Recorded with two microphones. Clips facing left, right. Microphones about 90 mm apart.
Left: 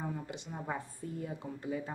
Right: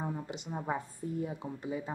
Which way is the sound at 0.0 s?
20° right (ahead or behind).